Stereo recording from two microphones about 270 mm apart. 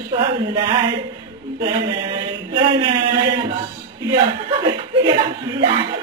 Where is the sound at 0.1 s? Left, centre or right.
Centre.